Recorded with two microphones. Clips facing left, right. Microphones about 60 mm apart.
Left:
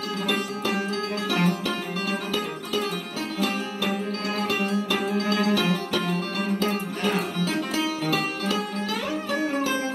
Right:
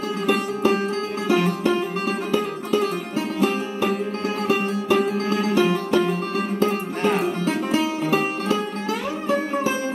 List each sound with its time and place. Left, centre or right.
1.2 s music: right